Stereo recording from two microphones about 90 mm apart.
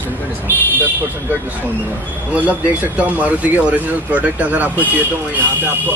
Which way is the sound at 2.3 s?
15° right (ahead or behind).